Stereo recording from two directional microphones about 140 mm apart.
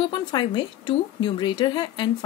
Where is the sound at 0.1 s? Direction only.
35° left (ahead or behind).